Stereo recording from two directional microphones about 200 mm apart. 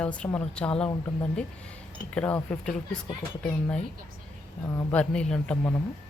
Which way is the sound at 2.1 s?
5° left (ahead or behind).